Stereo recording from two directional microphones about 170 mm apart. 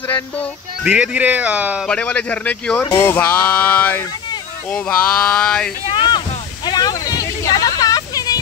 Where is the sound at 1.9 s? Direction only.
5° left (ahead or behind).